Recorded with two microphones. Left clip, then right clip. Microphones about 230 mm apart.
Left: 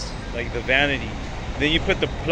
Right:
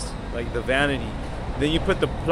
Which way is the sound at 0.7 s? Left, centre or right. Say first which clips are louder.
Left 3 dB; centre.